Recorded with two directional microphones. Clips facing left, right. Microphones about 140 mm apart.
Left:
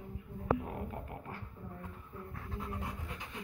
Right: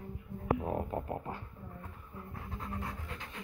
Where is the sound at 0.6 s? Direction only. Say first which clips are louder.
Right 7 dB; 30° right (ahead or behind).